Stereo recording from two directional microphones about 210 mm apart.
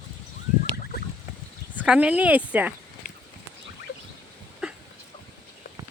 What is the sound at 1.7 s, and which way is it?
Speech, 5° right (ahead or behind).